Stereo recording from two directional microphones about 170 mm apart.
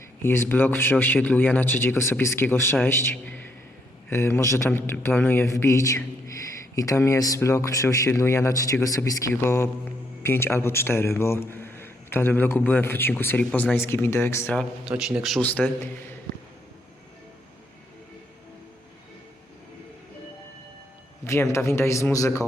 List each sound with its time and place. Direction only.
0.2 s a man's voice: 15° left (ahead or behind); by 15.4 s 5° right (ahead or behind)
15.4 s a man's voice: 10° left (ahead or behind)
21.2 s a man's voice: 15° left (ahead or behind)